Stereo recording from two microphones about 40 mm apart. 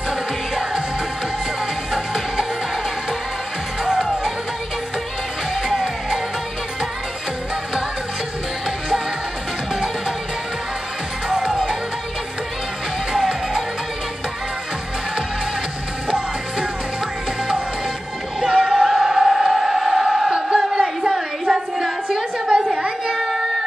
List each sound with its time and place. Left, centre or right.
0.1 s music: centre
1.9 s music: centre
3.8 s music: centre
5.5 s music: centre
11.2 s music: centre
18.5 s music: centre
20.3 s battle cry: right
21.1 s a sound: centre
22.8 s a sound: right